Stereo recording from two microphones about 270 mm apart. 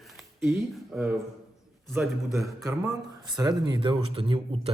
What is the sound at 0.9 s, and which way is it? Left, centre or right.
Speech, centre.